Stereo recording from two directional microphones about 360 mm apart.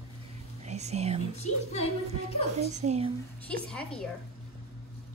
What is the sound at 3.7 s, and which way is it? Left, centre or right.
Speech, centre.